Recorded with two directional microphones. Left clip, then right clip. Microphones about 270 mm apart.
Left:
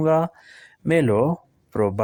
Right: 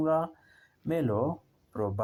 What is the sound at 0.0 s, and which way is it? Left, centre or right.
Speech, left.